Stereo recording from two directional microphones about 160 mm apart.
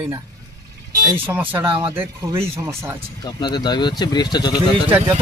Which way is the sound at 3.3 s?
30° left (ahead or behind).